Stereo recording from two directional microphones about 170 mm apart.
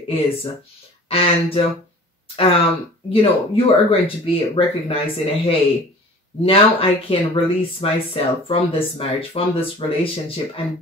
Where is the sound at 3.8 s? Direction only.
35° left (ahead or behind).